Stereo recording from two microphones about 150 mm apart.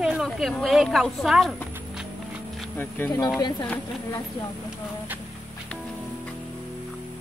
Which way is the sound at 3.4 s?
30° left (ahead or behind).